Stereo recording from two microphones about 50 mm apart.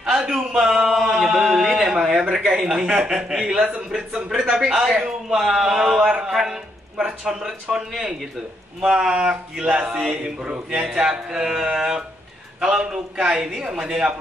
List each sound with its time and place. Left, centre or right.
0.0 s a sound: centre
3.9 s a man's voice: centre
8.8 s a man's voice: centre